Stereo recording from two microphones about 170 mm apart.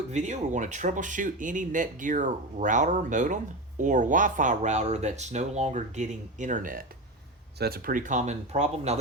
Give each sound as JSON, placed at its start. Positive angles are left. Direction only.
{"t": 0.1, "sound": "speech", "side_deg": -45}